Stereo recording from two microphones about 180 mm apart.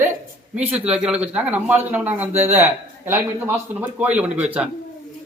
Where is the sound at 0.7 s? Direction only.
5° right (ahead or behind).